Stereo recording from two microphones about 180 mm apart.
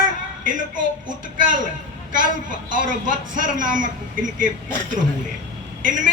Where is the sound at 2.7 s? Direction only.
45° right (ahead or behind).